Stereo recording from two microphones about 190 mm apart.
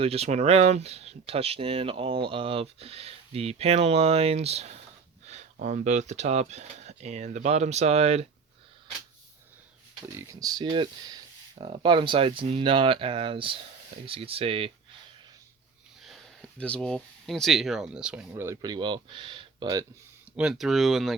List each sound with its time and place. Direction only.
0.0 s speech: 35° right (ahead or behind)
5.2 s a sound: 35° right (ahead or behind)
5.5 s speech: 40° right (ahead or behind)
10.2 s speech: 20° right (ahead or behind)
16.0 s speech: 5° left (ahead or behind); by 19.8 s 25° right (ahead or behind)
20.3 s speech: 5° right (ahead or behind)